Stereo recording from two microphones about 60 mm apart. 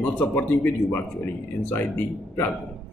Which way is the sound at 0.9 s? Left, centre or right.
Left.